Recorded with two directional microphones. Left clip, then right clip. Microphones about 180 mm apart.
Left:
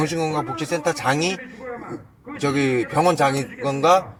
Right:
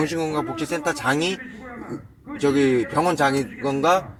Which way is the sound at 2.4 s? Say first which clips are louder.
Right 2 dB; 25° left (ahead or behind).